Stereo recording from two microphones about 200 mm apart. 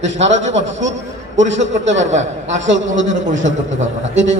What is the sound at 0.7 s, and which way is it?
Speech, 65° right (ahead or behind).